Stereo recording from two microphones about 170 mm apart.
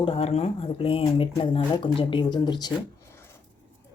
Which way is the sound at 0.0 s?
35° left (ahead or behind).